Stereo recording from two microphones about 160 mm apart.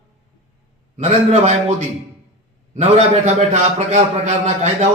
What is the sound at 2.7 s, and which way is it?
A man's voice, 45° right (ahead or behind).